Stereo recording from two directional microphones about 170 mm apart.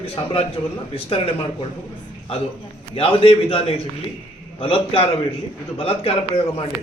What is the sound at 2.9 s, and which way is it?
A man's voice, 35° left (ahead or behind).